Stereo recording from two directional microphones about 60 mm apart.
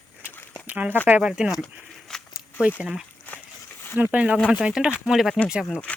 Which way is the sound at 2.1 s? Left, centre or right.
Centre.